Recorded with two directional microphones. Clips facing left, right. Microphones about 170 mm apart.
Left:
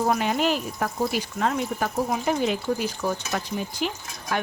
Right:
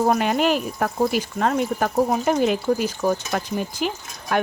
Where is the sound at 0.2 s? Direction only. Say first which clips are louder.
Right 4 dB; 60° right (ahead or behind).